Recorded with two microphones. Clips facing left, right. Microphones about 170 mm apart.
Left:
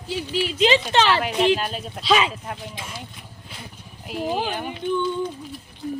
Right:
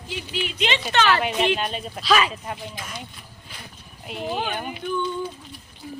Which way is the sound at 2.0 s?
25° left (ahead or behind).